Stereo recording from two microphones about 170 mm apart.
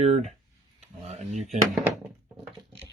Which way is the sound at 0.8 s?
40° right (ahead or behind).